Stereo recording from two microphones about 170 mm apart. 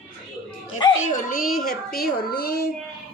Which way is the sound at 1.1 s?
55° left (ahead or behind).